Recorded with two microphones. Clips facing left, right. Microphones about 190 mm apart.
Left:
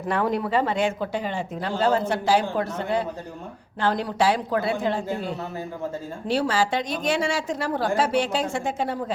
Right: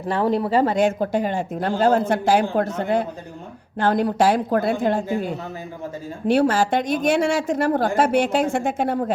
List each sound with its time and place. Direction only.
0.1 s speech: 30° right (ahead or behind); by 5.0 s 50° right (ahead or behind)
6.2 s speech: 55° right (ahead or behind)